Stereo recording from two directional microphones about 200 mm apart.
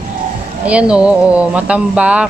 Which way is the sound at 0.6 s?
5° right (ahead or behind).